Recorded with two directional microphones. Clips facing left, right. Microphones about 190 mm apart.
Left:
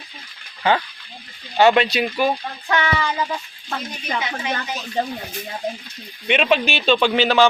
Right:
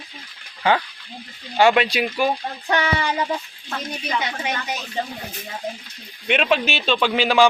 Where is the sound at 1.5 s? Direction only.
10° right (ahead or behind).